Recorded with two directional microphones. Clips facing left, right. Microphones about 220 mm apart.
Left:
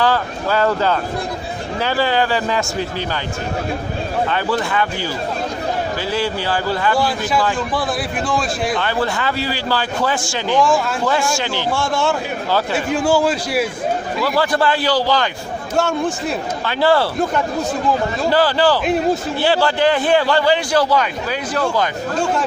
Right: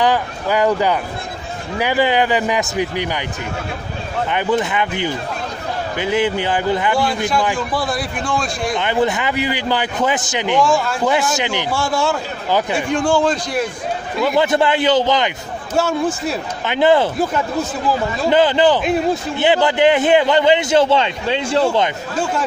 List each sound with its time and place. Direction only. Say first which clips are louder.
0.0 s a man's voice: right 1 dB; 15° right (ahead or behind)
4.3 s a man's voice: right 2 dB; 20° right (ahead or behind)
7.7 s a man's voice: even; centre (ahead or behind)
8.7 s a man's voice: right 2 dB; 20° right (ahead or behind)
10.6 s a man's voice: left 1 dB; centre (ahead or behind)
11.1 s a man's voice: right 3 dB; 20° right (ahead or behind)
11.7 s a man's voice: left 1 dB; centre (ahead or behind)
14.2 s a man's voice: right 3 dB; 20° right (ahead or behind)
15.7 s a man's voice: right 1 dB; centre (ahead or behind)
16.6 s a man's voice: right 2 dB; 20° right (ahead or behind)
18.3 s a man's voice: right 3 dB; 20° right (ahead or behind)